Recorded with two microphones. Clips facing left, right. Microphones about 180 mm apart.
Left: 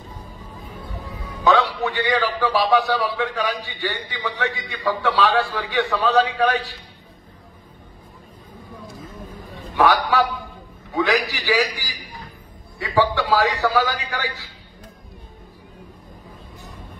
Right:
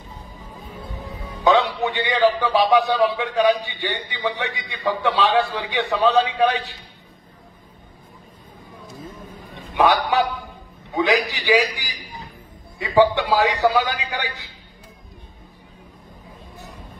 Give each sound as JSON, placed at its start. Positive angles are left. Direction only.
{"t": 1.4, "sound": "a man's voice", "side_deg": -20}
{"t": 9.5, "sound": "a sound", "side_deg": -20}
{"t": 11.0, "sound": "a man's voice", "side_deg": -20}